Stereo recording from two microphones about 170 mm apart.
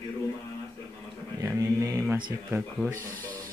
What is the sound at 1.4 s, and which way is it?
Mantra, 20° right (ahead or behind).